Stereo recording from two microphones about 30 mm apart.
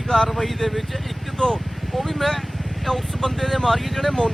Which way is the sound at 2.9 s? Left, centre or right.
Centre.